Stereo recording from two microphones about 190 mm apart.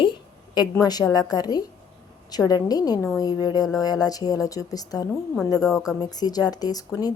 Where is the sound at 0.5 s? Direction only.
20° left (ahead or behind).